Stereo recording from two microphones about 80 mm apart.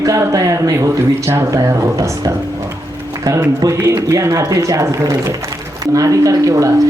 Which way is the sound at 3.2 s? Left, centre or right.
Right.